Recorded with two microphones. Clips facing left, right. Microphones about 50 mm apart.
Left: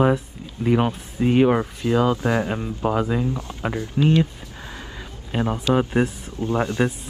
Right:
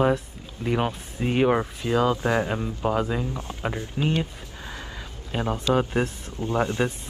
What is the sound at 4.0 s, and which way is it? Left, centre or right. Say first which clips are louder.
Speech: left 7 dB; centre.